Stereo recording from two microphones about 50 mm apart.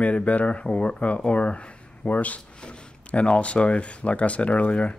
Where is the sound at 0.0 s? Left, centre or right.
Left.